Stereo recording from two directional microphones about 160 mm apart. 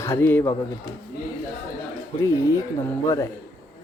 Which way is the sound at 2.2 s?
20° left (ahead or behind).